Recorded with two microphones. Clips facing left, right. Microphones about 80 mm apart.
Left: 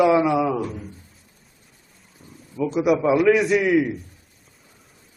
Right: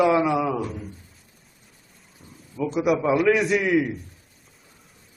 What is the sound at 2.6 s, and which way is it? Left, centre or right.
A man's voice, centre.